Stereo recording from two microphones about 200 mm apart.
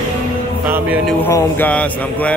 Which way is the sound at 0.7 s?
5° right (ahead or behind).